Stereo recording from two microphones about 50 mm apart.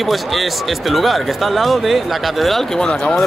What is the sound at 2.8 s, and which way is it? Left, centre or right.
Speech, left.